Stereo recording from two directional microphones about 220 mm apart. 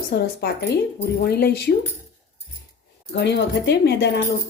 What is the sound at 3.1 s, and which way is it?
A woman's voice, 50° left (ahead or behind).